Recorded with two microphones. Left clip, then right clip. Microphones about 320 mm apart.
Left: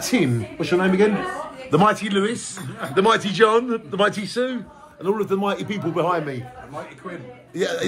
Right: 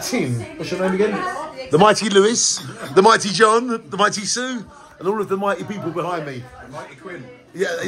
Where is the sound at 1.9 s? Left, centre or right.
Right.